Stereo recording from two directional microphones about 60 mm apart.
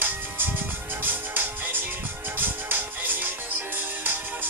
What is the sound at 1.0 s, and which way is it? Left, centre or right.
Music, right.